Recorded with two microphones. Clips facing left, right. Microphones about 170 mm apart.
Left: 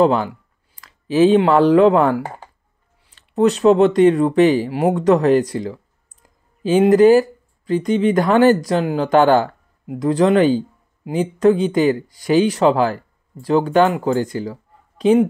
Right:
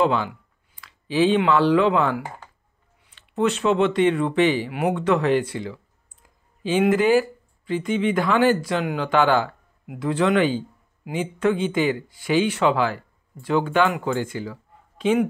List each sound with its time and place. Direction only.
0.0 s speech: 40° left (ahead or behind)